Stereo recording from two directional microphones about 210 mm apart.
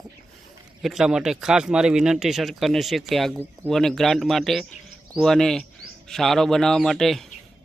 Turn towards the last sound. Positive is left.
turn(degrees=0)  # may be behind; listen again after turning